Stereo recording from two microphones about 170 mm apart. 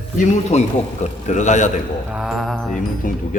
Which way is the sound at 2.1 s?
5° right (ahead or behind).